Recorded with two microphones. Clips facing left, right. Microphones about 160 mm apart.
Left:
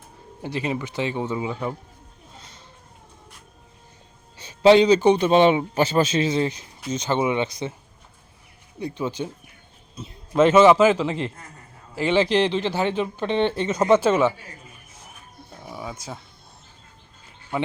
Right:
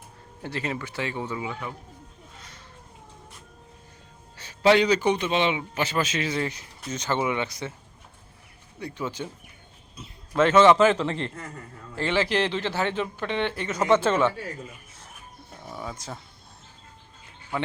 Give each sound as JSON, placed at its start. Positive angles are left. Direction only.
{"t": 0.4, "sound": "a man's voice", "side_deg": 15}
{"t": 4.4, "sound": "a man's voice", "side_deg": 20}
{"t": 8.8, "sound": "a man's voice", "side_deg": 20}
{"t": 11.9, "sound": "speech", "side_deg": 15}
{"t": 15.6, "sound": "a sound", "side_deg": 10}